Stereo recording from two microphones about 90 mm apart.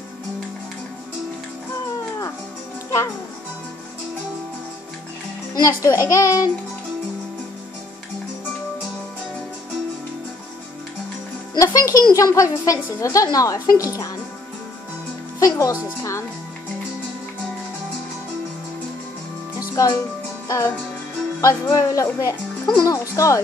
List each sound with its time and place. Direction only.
5.5 s speech: 40° left (ahead or behind)
11.5 s speech: 40° left (ahead or behind)
15.3 s music: 40° left (ahead or behind)
16.0 s speech: 35° left (ahead or behind)
19.7 s speech: 35° left (ahead or behind)
20.4 s music: 35° left (ahead or behind)
21.4 s speech: 40° left (ahead or behind)